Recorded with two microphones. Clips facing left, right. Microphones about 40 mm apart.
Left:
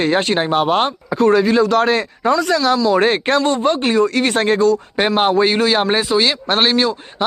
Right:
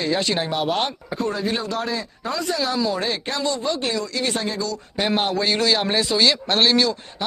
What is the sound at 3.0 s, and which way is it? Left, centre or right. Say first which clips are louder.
Speech: left 10 dB; left.